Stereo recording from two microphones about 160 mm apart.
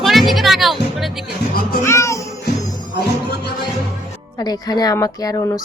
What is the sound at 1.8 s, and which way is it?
Speech, 20° left (ahead or behind).